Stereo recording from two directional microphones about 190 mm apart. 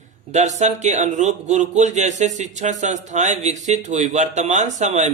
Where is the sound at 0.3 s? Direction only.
40° right (ahead or behind).